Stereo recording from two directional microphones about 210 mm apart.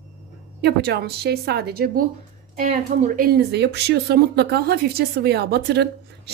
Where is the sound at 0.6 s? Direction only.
50° right (ahead or behind).